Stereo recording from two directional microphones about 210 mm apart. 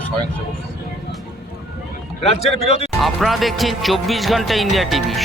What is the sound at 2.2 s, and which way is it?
Speech, 30° left (ahead or behind).